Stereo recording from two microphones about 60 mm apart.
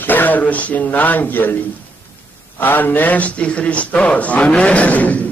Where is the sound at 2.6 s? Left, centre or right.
Left.